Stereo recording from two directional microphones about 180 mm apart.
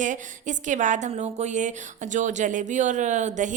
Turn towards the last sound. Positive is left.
turn(degrees=-40)  # may be behind; listen again after turning